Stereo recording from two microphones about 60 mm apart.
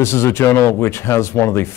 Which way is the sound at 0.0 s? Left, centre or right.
Left.